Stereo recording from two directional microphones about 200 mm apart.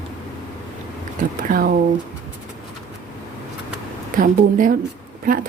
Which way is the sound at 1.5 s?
45° right (ahead or behind).